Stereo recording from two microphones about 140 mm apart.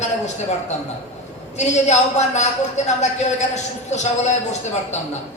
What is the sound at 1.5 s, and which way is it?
A woman's voice, 55° left (ahead or behind).